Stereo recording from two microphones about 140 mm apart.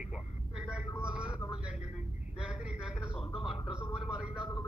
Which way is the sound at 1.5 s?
5° right (ahead or behind).